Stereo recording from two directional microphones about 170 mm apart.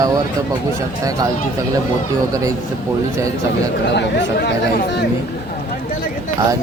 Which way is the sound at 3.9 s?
80° left.